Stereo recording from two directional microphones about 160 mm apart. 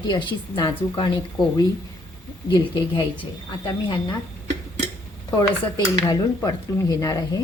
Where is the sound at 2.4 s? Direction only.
30° left (ahead or behind).